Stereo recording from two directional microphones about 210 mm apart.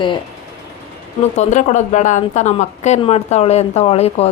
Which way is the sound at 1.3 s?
35° left (ahead or behind).